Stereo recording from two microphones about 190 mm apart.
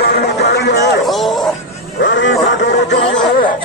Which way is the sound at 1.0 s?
Centre (ahead or behind).